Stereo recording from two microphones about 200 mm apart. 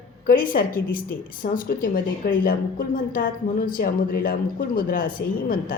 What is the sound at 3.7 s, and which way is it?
A woman's voice, 45° left (ahead or behind).